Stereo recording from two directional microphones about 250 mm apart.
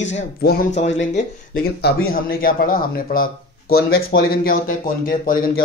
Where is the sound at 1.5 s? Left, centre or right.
Left.